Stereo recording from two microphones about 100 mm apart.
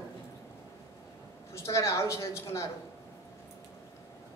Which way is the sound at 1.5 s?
30° left (ahead or behind).